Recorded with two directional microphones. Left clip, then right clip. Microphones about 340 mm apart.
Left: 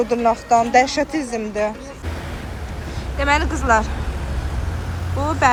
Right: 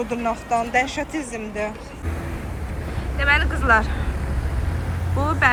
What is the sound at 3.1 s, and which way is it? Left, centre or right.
Speech, centre.